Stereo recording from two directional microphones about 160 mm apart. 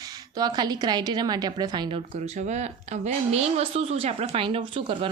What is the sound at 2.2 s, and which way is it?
A woman's voice, 45° right (ahead or behind).